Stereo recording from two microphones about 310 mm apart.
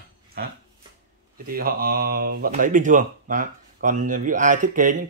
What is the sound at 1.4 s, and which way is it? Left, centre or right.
Speech, right.